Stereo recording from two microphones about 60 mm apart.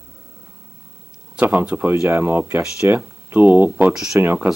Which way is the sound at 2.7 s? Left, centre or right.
Right.